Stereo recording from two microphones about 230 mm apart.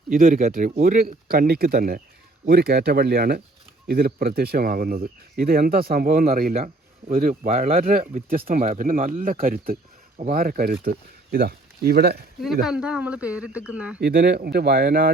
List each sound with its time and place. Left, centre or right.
0.1 s speech: right
12.6 s speech: centre
14.0 s speech: right